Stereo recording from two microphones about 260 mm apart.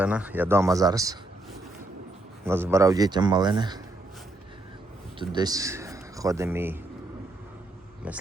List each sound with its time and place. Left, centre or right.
0.0 s a man's voice: centre
2.5 s a man's voice: centre
5.3 s a man's voice: centre